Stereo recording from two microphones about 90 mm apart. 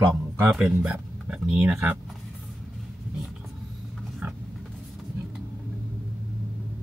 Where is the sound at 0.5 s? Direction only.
5° right (ahead or behind).